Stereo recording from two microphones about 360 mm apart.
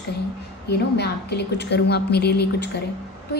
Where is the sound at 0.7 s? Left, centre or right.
Left.